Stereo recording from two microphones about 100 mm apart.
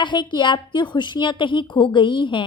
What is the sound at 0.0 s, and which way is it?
A woman's voice, 50° left (ahead or behind).